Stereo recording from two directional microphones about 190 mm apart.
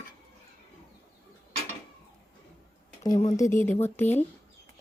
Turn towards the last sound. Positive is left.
turn(degrees=10)  # may be behind; listen again after turning